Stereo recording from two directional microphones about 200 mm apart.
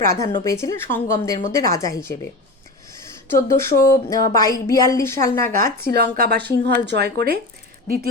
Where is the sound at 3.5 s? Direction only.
15° left (ahead or behind).